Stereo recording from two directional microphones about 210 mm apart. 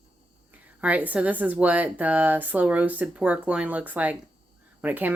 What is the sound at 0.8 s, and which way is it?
A woman's voice, 5° right (ahead or behind).